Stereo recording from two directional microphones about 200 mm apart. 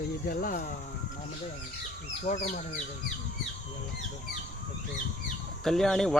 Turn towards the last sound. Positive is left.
turn(degrees=0)  # may be behind; listen again after turning